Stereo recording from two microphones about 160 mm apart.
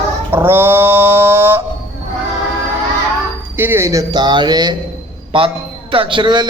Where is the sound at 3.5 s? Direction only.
15° right (ahead or behind); by 6.4 s 30° right (ahead or behind).